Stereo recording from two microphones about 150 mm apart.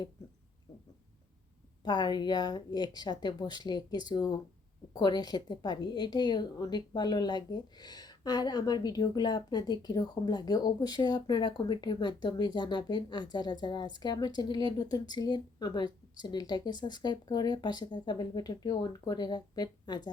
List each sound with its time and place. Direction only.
1.8 s a woman's voice: 30° left (ahead or behind)